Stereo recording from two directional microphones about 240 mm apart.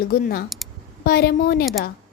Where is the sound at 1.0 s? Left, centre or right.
Left.